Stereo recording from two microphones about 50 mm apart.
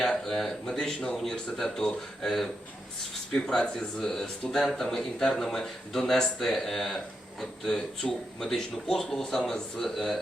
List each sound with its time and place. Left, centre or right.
0.0 s speech: centre
8.0 s speech: centre
8.4 s speech: centre